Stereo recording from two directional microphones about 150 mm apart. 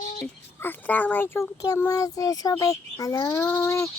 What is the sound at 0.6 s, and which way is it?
Speech, 10° left (ahead or behind).